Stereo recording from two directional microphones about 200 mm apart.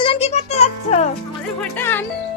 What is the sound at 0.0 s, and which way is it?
Music, 30° left (ahead or behind).